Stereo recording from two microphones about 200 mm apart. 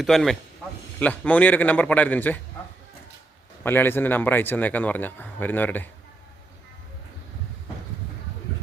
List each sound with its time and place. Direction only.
0.0 s a man's voice: centre (ahead or behind)
3.6 s speech: 10° left (ahead or behind)